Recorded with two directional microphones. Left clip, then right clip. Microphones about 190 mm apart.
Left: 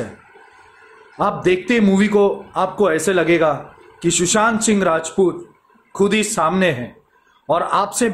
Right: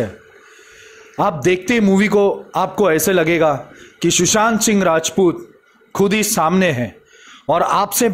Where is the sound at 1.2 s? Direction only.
45° right (ahead or behind).